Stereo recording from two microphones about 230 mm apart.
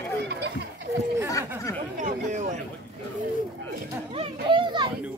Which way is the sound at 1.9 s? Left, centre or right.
Right.